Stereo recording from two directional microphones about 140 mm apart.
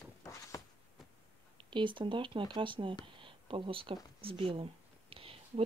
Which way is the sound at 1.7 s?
35° right (ahead or behind).